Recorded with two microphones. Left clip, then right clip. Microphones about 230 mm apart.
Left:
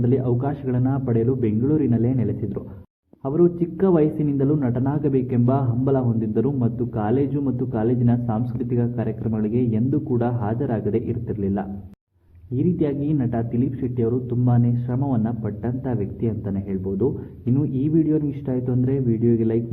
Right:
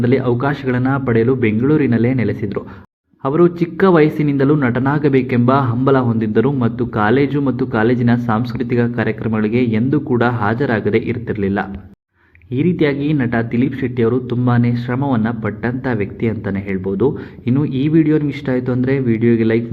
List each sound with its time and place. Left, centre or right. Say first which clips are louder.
0.0 s a man's voice: right 7 dB; right